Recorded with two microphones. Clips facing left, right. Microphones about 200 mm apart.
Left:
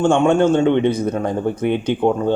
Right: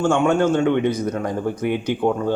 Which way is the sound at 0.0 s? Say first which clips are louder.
Left 3 dB; 25° left (ahead or behind).